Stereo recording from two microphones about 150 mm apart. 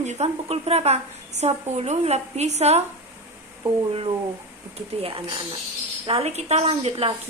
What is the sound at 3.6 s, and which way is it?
A woman's voice, 35° right (ahead or behind).